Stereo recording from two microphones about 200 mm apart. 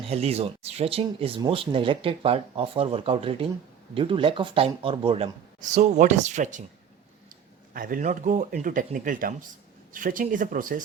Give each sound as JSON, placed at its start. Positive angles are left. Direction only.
{"t": 0.1, "sound": "speech", "side_deg": -30}
{"t": 7.7, "sound": "speech", "side_deg": -45}